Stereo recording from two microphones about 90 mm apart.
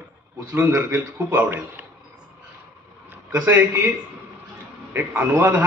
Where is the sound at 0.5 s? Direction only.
25° right (ahead or behind).